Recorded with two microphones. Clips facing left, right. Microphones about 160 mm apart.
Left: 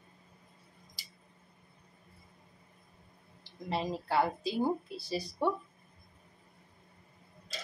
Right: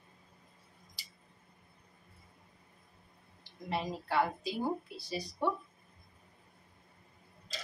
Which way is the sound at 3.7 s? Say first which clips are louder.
Left 2 dB; 30° left (ahead or behind).